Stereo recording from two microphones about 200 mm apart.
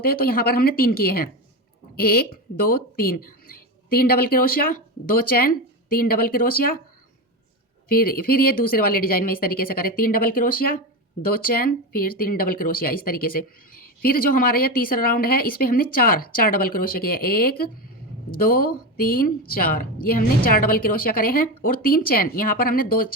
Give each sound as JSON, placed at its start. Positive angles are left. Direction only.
{"t": 0.0, "sound": "speech", "side_deg": 50}
{"t": 7.9, "sound": "speech", "side_deg": 50}